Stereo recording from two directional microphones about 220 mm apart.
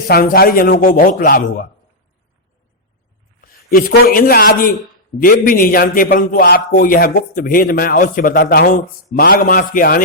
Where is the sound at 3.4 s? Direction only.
40° left (ahead or behind).